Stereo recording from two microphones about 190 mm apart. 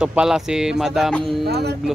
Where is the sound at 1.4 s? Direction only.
60° right (ahead or behind).